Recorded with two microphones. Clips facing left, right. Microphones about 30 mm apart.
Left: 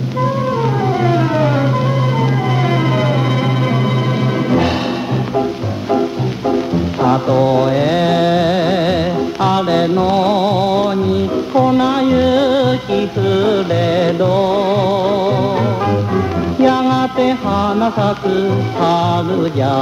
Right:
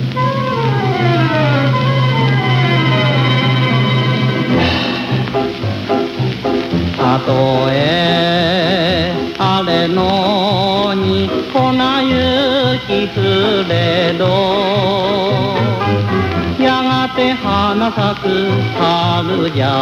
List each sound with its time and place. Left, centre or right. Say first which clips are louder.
1.0 s music: right 1 dB; right
2.7 s a sound: right 2 dB; right
7.0 s music: even; right